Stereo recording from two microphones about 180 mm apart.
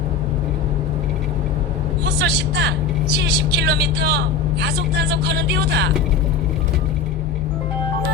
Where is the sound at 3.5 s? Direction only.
65° right (ahead or behind).